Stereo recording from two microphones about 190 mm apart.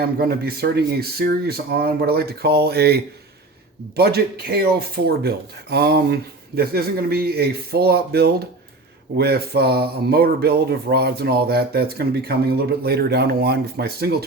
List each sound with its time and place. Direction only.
0.0 s speech: 55° right (ahead or behind)